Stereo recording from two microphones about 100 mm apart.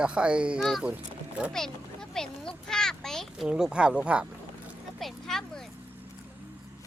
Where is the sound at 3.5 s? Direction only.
5° right (ahead or behind).